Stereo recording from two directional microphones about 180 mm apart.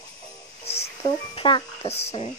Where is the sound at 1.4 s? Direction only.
30° left (ahead or behind).